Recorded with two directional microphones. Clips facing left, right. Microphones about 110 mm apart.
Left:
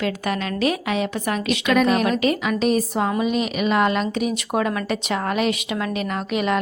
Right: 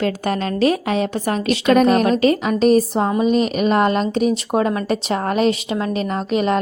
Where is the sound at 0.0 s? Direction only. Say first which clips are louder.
Right 4 dB; 35° right (ahead or behind).